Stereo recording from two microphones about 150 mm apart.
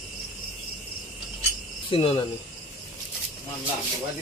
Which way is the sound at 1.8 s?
35° left (ahead or behind).